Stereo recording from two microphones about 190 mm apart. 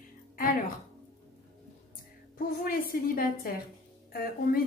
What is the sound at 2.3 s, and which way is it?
A woman's voice, 50° left (ahead or behind).